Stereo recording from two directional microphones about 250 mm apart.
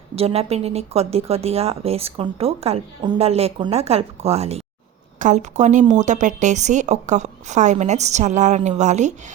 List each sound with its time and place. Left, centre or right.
0.2 s a woman's voice: right